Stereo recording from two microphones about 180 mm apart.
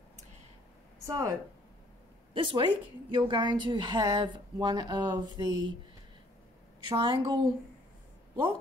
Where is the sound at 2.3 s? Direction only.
25° right (ahead or behind).